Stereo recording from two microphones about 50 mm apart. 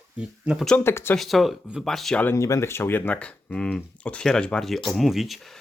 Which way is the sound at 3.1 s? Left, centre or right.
Left.